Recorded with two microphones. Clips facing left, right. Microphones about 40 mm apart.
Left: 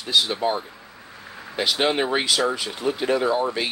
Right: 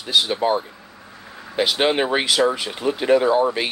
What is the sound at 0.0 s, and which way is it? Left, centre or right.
Speech, right.